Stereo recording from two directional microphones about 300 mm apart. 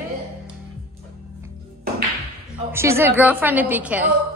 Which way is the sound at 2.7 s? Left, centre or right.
Centre.